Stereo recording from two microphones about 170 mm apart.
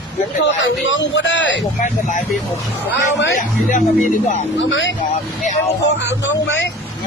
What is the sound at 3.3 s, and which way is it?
Speech, 50° left (ahead or behind).